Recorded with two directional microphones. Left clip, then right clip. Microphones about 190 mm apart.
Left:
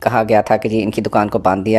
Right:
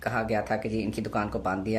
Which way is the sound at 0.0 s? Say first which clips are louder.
Left 15 dB; 35° left (ahead or behind).